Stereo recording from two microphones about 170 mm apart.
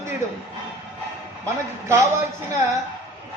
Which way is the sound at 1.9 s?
15° right (ahead or behind).